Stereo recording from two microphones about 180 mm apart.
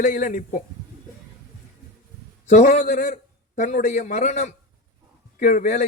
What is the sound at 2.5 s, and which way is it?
A man's voice, 40° left (ahead or behind).